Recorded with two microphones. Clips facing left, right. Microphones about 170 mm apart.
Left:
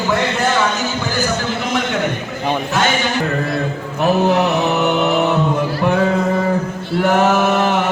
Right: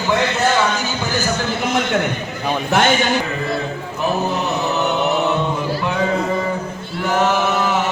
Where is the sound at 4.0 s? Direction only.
85° left.